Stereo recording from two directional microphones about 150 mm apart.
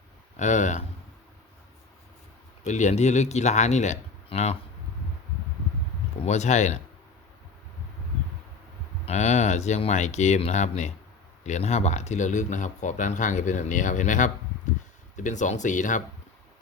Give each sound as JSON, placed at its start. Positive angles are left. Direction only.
{"t": 0.3, "sound": "speech", "side_deg": 50}
{"t": 2.6, "sound": "speech", "side_deg": 50}
{"t": 6.2, "sound": "speech", "side_deg": 50}
{"t": 9.0, "sound": "speech", "side_deg": 50}